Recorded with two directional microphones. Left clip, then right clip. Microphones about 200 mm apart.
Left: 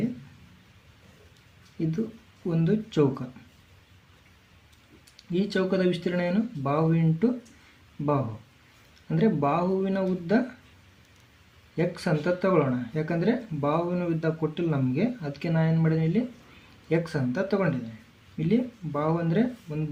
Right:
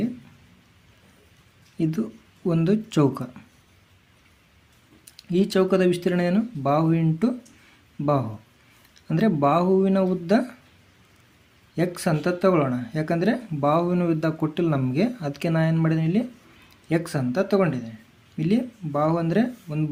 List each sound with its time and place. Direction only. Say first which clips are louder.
2.5 s speech: right 4 dB; 40° right (ahead or behind)
5.1 s speech: right 6 dB; 35° right (ahead or behind)
9.0 s speech: right 4 dB; 35° right (ahead or behind)
11.8 s speech: right 3 dB; 30° right (ahead or behind)